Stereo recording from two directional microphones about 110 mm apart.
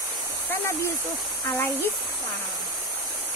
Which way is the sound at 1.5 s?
20° left (ahead or behind).